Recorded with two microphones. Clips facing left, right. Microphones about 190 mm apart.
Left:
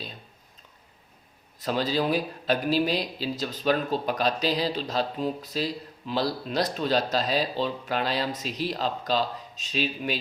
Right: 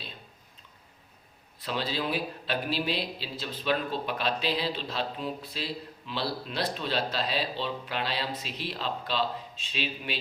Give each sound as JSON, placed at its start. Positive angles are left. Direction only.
{"t": 1.5, "sound": "a man's voice", "side_deg": 45}